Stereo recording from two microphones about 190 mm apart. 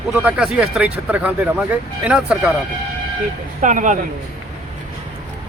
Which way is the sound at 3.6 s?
40° right (ahead or behind).